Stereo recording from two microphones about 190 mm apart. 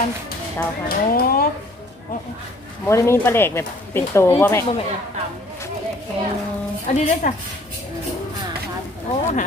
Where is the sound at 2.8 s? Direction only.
15° left (ahead or behind).